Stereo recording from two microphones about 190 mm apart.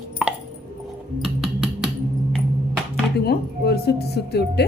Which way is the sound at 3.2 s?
60° left (ahead or behind).